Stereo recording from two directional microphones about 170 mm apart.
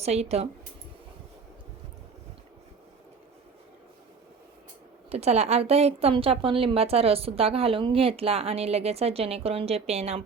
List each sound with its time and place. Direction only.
0.0 s a woman's voice: 40° right (ahead or behind)
5.0 s a woman's voice: 40° right (ahead or behind)